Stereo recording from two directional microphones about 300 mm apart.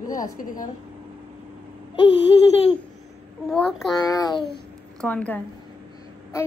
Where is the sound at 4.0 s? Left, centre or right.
Centre.